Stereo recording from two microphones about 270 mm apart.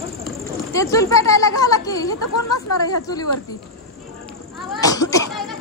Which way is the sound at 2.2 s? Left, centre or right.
Left.